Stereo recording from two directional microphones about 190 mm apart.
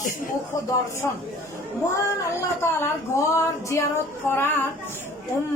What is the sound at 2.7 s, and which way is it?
A woman's voice, 15° left (ahead or behind).